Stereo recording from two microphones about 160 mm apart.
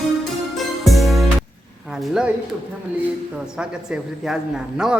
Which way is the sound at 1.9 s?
5° right (ahead or behind).